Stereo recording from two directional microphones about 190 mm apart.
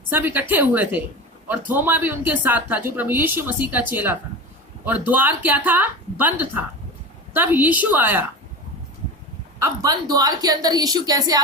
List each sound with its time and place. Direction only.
0.1 s speech: 10° right (ahead or behind)
9.6 s a woman's voice: 20° right (ahead or behind)